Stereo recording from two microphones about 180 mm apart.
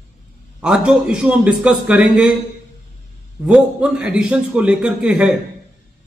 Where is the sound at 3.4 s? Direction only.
5° right (ahead or behind).